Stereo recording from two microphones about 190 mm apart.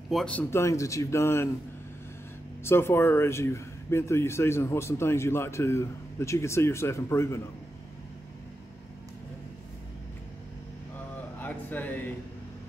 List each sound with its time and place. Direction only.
0.1 s a man's voice: 5° left (ahead or behind)
2.6 s a man's voice: 15° left (ahead or behind)
11.3 s a sound: 10° left (ahead or behind)